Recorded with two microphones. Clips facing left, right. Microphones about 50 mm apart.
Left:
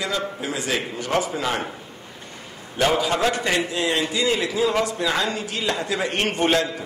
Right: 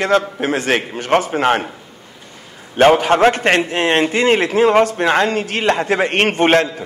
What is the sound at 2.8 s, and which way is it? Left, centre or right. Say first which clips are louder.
A man's voice: right 9 dB; right.